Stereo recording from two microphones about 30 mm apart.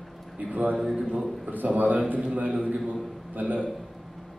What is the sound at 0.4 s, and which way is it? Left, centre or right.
Speech, right.